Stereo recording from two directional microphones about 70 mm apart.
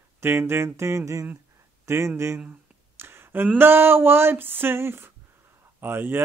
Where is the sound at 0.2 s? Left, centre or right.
Right.